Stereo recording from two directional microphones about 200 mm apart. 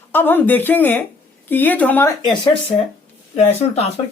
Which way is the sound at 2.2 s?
25° left (ahead or behind).